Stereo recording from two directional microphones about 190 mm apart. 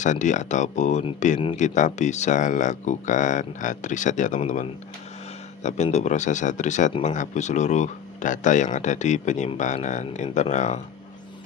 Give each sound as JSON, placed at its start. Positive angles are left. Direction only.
{"t": 0.0, "sound": "speech", "side_deg": 40}